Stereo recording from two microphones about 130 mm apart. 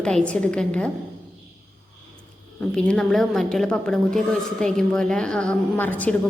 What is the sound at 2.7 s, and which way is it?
A woman's voice, 5° left (ahead or behind).